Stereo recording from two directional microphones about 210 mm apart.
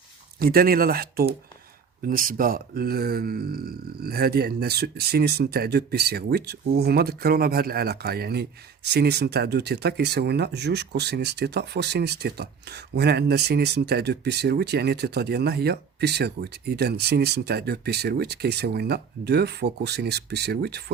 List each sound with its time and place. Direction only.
0.3 s speech: 45° right (ahead or behind)